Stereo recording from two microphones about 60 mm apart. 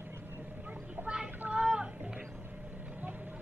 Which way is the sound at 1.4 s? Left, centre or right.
Right.